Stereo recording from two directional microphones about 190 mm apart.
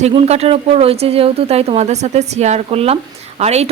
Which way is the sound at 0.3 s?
30° right (ahead or behind).